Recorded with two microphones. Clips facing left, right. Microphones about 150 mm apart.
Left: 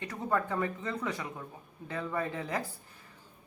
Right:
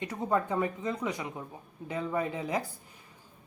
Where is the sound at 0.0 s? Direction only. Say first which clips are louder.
Right 2 dB; 15° right (ahead or behind).